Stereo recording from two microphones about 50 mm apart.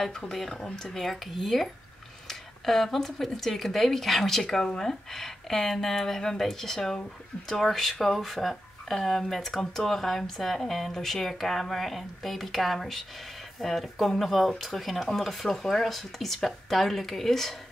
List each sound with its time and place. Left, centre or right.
0.0 s speech: centre